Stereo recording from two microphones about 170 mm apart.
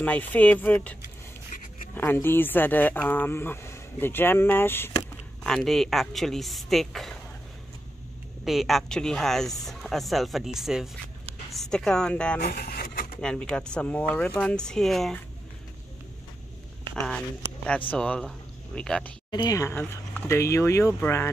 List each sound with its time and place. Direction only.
0.0 s speech: 10° left (ahead or behind)
2.0 s speech: 10° left (ahead or behind)
5.4 s speech: centre (ahead or behind)
8.5 s a woman's voice: centre (ahead or behind)
12.4 s vehicle: 60° left (ahead or behind)
13.2 s speech: 5° left (ahead or behind)
17.6 s speech: 10° left (ahead or behind)
19.3 s speech: 20° left (ahead or behind)